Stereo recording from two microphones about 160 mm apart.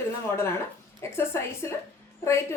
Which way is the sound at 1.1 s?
15° left (ahead or behind).